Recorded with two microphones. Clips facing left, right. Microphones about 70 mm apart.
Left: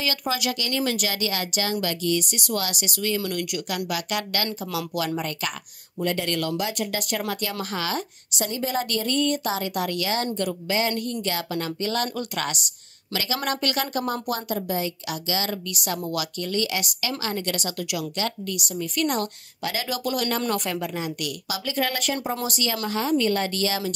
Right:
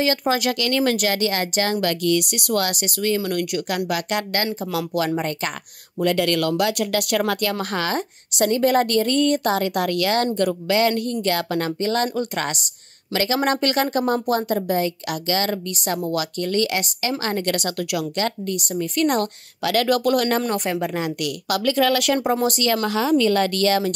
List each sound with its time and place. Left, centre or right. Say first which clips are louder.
0.0 s speech: right 6 dB; right
5.9 s speech: right 6 dB; right
7.5 s speech: right 4 dB; right
8.4 s a woman's voice: right 9 dB; right
15.7 s speech: right 5 dB; right
19.6 s a woman's voice: right 9 dB; right
20.4 s speech: right 3 dB; right
20.8 s a woman's voice: right 5 dB; right
22.4 s speech: right 7 dB; right
22.8 s speech: right 3 dB; right